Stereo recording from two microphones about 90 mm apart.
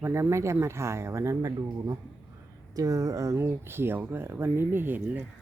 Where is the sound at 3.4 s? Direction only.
25° right (ahead or behind).